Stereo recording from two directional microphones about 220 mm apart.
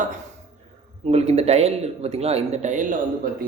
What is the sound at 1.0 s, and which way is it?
Speech, 30° right (ahead or behind).